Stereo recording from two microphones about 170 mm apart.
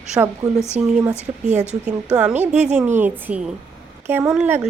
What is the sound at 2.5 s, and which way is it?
Speech, 45° right (ahead or behind).